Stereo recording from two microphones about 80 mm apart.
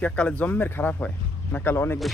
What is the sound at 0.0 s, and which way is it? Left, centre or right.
Speech, centre.